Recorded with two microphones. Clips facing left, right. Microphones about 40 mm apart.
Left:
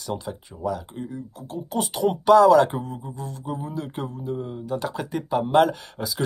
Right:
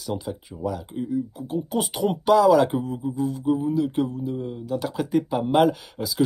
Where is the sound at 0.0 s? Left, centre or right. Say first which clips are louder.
Right 1 dB; centre.